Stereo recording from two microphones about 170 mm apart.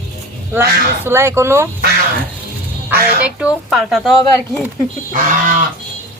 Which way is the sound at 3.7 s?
Centre (ahead or behind).